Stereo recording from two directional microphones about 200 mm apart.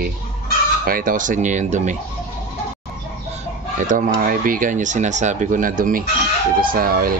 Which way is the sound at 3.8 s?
40° right (ahead or behind).